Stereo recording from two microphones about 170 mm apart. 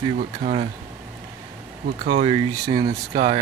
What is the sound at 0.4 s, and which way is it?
Speech, 50° right (ahead or behind).